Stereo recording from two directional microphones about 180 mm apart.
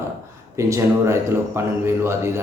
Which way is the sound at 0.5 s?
15° right (ahead or behind).